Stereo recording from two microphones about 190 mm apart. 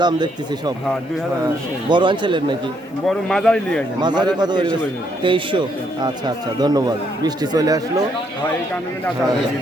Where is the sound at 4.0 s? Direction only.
20° right (ahead or behind).